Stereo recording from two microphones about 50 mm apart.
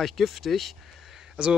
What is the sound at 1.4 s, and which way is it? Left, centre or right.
Speech, right.